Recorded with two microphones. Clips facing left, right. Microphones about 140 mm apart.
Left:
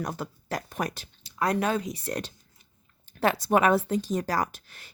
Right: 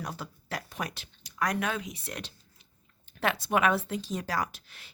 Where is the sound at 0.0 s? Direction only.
50° left (ahead or behind).